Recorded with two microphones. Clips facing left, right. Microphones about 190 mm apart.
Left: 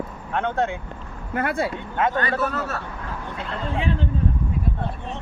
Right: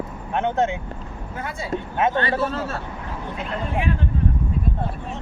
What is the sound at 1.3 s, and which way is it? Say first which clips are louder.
Speech: left 8 dB; 60° left (ahead or behind).